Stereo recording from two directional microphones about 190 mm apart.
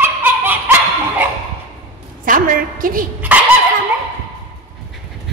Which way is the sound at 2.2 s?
45° right (ahead or behind).